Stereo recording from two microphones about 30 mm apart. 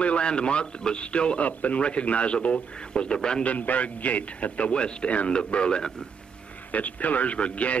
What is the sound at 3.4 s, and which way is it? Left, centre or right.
Speech, left.